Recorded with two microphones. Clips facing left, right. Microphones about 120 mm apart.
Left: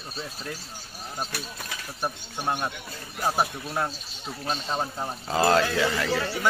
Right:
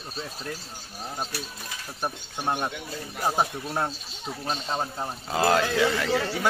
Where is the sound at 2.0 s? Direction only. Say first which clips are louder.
Even; 15° right (ahead or behind).